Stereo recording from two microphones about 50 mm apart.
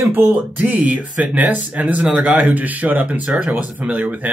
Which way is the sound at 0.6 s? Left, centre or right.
Right.